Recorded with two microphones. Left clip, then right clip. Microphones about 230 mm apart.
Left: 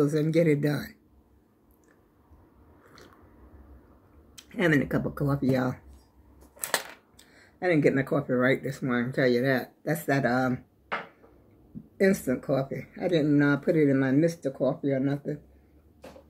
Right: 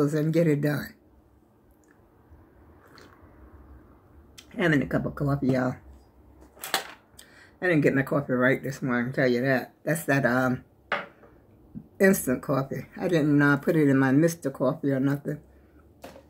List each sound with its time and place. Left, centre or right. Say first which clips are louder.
0.0 s speech: even; centre
4.4 s speech: even; centre
7.5 s speech: right 1 dB; centre
12.0 s speech: right 2 dB; centre